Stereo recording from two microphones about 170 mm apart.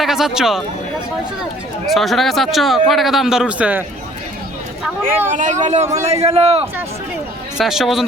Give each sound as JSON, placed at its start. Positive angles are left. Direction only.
{"t": 0.0, "sound": "speech", "side_deg": 0}
{"t": 1.9, "sound": "a man's voice", "side_deg": 0}
{"t": 5.3, "sound": "a man's voice", "side_deg": -45}
{"t": 7.6, "sound": "a man's voice", "side_deg": 0}